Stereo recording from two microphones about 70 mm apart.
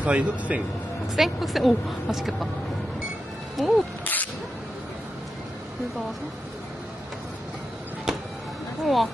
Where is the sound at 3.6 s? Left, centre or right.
Centre.